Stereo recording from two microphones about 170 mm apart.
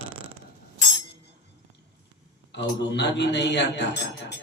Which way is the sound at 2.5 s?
90° left.